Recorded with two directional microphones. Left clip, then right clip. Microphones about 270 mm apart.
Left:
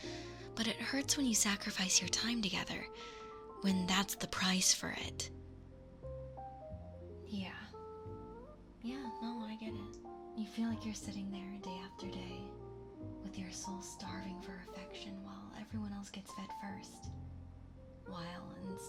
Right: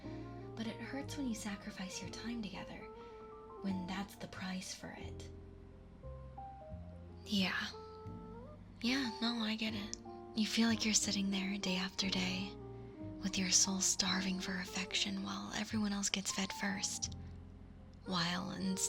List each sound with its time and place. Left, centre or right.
0.0 s speech: left
7.3 s speech: right
8.8 s speech: right
18.1 s speech: right